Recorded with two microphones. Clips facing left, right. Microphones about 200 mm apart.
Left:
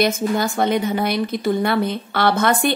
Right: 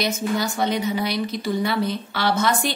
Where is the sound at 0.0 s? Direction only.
55° left (ahead or behind).